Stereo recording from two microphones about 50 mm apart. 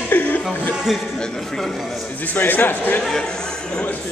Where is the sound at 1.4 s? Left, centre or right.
Centre.